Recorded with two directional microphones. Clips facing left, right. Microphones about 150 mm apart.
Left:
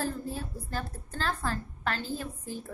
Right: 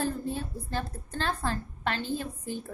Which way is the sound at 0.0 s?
25° right (ahead or behind).